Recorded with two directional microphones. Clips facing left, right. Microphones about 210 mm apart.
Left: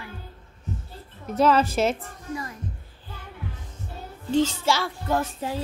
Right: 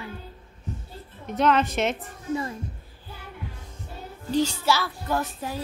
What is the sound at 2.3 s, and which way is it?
Music, 25° right (ahead or behind).